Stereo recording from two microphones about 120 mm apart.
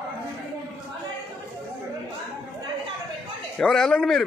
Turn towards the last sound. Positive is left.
turn(degrees=0)  # may be behind; listen again after turning